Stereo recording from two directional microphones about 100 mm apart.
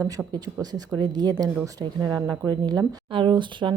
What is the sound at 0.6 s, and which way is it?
A woman's voice, 40° right (ahead or behind).